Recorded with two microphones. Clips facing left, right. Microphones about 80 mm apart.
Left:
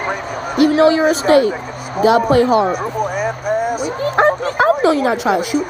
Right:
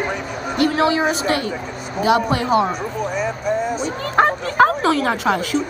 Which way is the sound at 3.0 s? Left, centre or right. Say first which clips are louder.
Left 3 dB; left.